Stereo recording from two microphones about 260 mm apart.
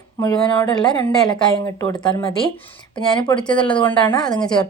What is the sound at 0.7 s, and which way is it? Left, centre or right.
Speech, centre.